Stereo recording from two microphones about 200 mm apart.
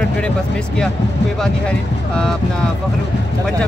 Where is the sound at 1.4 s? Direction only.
5° left (ahead or behind).